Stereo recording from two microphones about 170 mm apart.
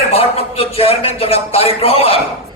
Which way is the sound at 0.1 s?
35° left (ahead or behind).